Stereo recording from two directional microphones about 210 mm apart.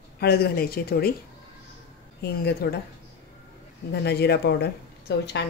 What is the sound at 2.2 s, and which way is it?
Speech, 50° left (ahead or behind).